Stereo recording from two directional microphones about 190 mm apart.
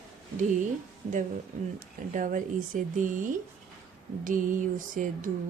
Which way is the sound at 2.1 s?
45° right (ahead or behind).